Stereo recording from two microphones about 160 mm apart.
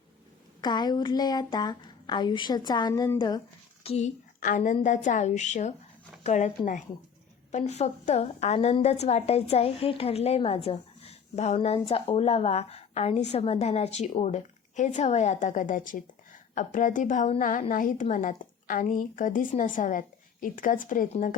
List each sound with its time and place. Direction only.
0.6 s speech: 25° left (ahead or behind)
3.8 s a woman's voice: 40° left (ahead or behind)
4.4 s a woman's voice: 60° left (ahead or behind)
7.5 s a woman's voice: 45° left (ahead or behind)